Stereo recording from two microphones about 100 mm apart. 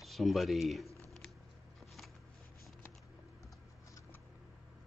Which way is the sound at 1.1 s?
5° left (ahead or behind).